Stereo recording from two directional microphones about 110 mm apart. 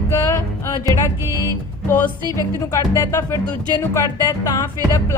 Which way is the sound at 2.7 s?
30° left (ahead or behind).